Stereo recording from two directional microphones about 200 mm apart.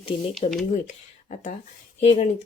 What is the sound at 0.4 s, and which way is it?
Speech, 35° left (ahead or behind).